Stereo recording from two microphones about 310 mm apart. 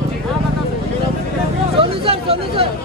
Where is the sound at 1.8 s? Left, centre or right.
Centre.